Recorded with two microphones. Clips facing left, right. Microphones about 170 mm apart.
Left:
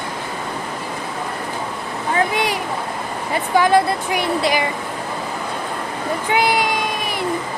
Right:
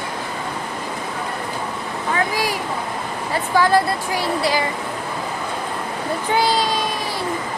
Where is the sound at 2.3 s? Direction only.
20° left (ahead or behind).